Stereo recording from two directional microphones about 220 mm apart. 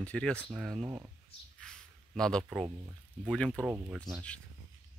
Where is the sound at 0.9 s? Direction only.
15° right (ahead or behind).